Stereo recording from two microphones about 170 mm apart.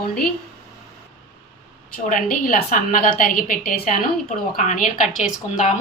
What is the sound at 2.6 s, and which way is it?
A woman's voice, 55° left (ahead or behind).